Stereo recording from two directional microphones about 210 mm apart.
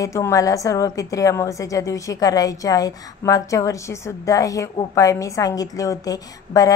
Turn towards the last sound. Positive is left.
turn(degrees=15)  # may be behind; listen again after turning